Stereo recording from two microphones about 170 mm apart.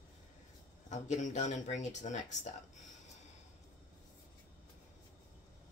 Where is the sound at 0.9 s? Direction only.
45° left (ahead or behind).